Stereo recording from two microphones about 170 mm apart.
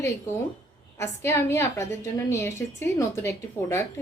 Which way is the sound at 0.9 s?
15° left (ahead or behind).